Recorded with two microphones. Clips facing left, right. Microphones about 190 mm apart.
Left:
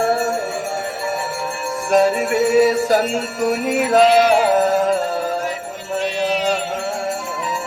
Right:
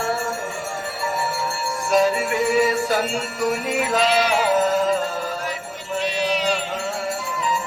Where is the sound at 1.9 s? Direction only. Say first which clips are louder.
Left 4 dB; 50° left (ahead or behind).